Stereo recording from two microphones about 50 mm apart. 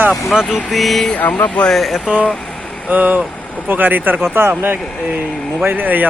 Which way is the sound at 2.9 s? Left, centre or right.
Right.